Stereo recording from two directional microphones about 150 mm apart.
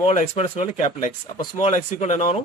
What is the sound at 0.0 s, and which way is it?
Speech, 50° left (ahead or behind).